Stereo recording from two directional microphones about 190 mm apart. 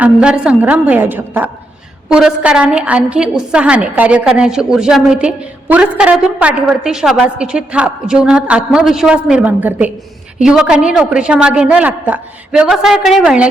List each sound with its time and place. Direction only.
0.0 s a woman's voice: 5° right (ahead or behind)